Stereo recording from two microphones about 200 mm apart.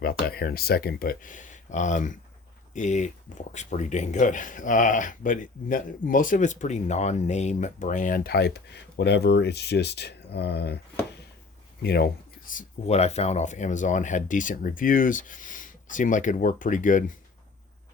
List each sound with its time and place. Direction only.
0.3 s speech: 50° left (ahead or behind)
11.8 s speech: 55° left (ahead or behind)